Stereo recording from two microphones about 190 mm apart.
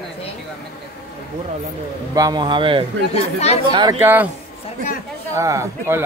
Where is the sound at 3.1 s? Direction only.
35° left (ahead or behind).